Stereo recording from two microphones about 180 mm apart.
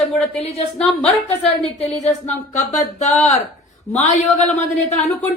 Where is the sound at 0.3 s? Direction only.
35° left (ahead or behind).